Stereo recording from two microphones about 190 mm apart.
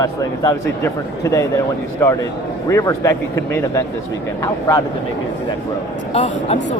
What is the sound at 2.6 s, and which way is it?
Speech, 15° left (ahead or behind).